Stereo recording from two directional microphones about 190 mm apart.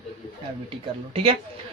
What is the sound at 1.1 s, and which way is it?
Speech, 30° right (ahead or behind).